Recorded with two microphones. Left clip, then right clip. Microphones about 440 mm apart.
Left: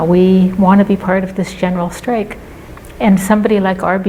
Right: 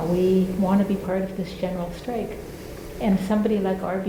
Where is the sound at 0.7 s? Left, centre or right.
Left.